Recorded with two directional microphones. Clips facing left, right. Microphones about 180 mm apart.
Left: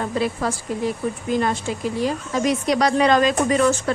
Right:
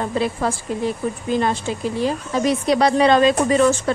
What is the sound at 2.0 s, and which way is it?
A woman's voice, 30° right (ahead or behind).